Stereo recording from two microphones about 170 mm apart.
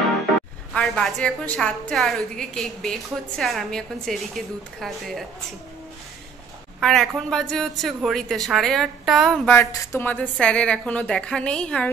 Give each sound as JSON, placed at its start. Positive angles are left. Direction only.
{"t": 0.7, "sound": "a woman's voice", "side_deg": 5}
{"t": 6.8, "sound": "a woman's voice", "side_deg": 0}
{"t": 9.5, "sound": "a woman's voice", "side_deg": 15}